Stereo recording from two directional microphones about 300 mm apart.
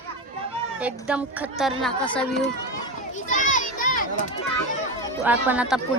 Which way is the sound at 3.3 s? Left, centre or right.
Left.